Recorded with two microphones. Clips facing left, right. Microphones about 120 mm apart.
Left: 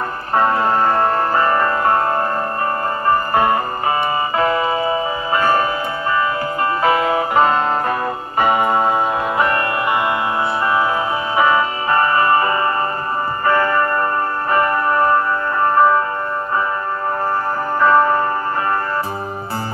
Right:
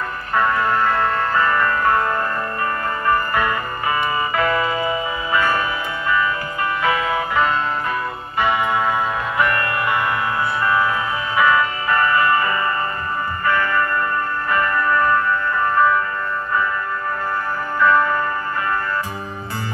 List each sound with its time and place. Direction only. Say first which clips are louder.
0.3 s music: left 3 dB; 35° left (ahead or behind)
6.8 s music: left 4 dB; 35° left (ahead or behind)
11.3 s music: left 1 dB; 30° left (ahead or behind)
17.7 s music: left 3 dB; 35° left (ahead or behind)